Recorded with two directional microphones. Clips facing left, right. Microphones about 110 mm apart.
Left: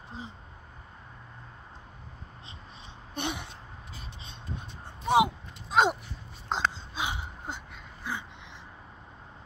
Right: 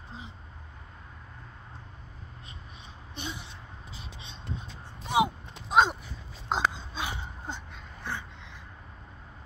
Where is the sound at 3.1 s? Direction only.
60° left (ahead or behind).